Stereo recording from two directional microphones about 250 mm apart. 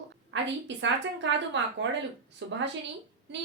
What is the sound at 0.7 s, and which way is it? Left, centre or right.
A woman's voice, right.